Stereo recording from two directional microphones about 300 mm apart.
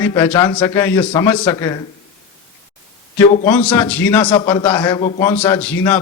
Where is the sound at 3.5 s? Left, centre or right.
Centre.